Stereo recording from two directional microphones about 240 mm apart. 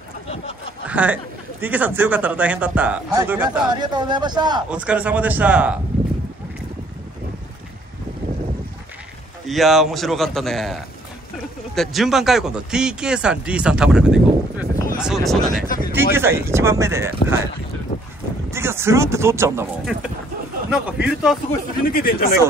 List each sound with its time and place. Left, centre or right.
0.8 s a man's voice: centre
4.6 s speech: centre
9.5 s speech: centre
15.6 s speech: left
15.9 s a man's voice: centre
18.5 s a man's voice: centre
21.8 s speech: left